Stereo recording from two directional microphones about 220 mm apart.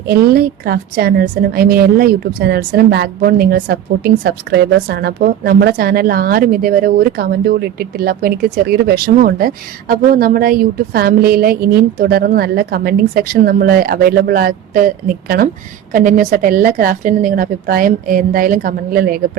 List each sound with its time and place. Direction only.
0.1 s a woman's voice: 45° right (ahead or behind)